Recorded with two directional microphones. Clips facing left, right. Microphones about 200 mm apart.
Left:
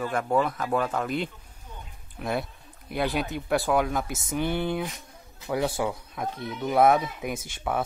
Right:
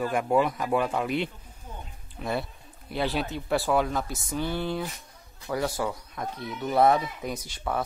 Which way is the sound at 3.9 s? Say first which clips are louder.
Left 1 dB; 15° left (ahead or behind).